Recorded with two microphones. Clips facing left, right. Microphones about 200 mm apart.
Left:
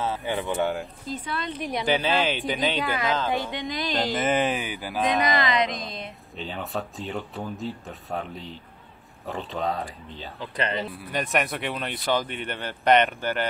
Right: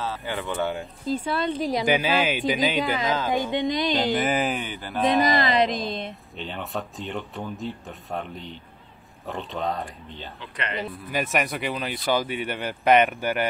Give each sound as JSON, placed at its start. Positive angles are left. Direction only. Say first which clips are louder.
{"t": 0.0, "sound": "speech", "louder": "left 2 dB", "side_deg": 20}
{"t": 1.2, "sound": "speech", "louder": "right 6 dB", "side_deg": -30}
{"t": 1.9, "sound": "speech", "louder": "left 1 dB", "side_deg": -10}
{"t": 2.8, "sound": "speech", "louder": "right 1 dB", "side_deg": -15}
{"t": 3.9, "sound": "speech", "louder": "right 1 dB", "side_deg": 0}
{"t": 5.2, "sound": "speech", "louder": "right 3 dB", "side_deg": -35}
{"t": 6.0, "sound": "speech", "louder": "right 1 dB", "side_deg": 0}
{"t": 10.4, "sound": "speech", "louder": "left 3 dB", "side_deg": 35}
{"t": 11.1, "sound": "speech", "louder": "right 1 dB", "side_deg": -5}